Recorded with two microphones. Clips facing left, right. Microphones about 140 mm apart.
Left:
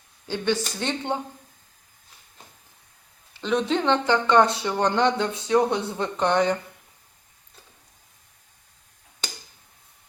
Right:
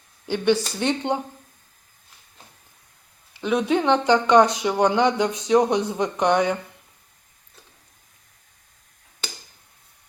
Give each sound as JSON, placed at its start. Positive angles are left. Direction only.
{"t": 0.3, "sound": "speech", "side_deg": -15}
{"t": 3.3, "sound": "speech", "side_deg": -10}